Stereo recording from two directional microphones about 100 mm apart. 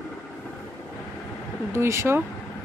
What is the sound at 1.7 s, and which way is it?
Speech, 25° right (ahead or behind).